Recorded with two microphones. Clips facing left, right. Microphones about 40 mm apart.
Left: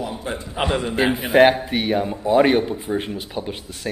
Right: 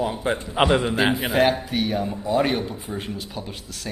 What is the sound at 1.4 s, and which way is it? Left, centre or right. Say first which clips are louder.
Speech: left 6 dB; left.